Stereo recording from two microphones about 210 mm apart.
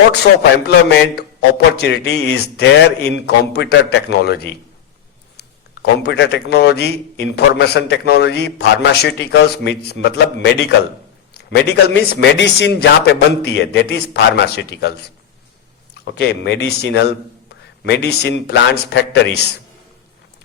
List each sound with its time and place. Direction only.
0.9 s speech: 50° left (ahead or behind)
11.3 s a sound: 50° left (ahead or behind)
11.9 s speech: 55° left (ahead or behind)
16.0 s speech: 55° left (ahead or behind)